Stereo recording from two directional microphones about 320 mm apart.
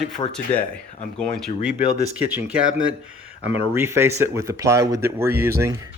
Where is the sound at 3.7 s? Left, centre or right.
Centre.